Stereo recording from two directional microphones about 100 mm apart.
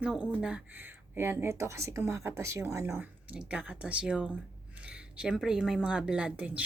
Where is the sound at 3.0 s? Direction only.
15° right (ahead or behind).